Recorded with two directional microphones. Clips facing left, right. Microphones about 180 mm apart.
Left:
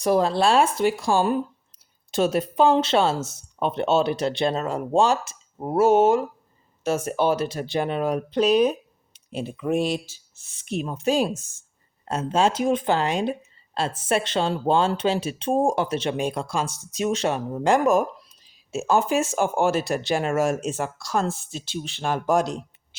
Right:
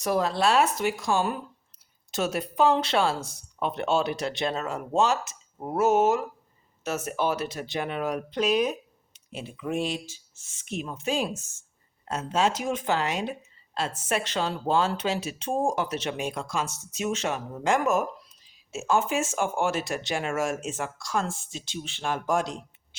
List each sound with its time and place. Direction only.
0.0 s speech: 30° left (ahead or behind)
9.1 s a sound: 35° left (ahead or behind)
9.5 s speech: 50° left (ahead or behind)